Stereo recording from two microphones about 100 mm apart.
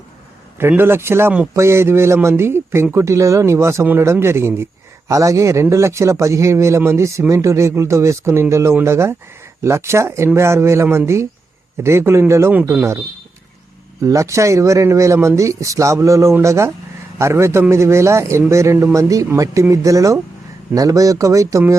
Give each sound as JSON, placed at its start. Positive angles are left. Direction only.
{"t": 0.7, "sound": "a man's voice", "side_deg": -25}
{"t": 14.0, "sound": "a man's voice", "side_deg": -30}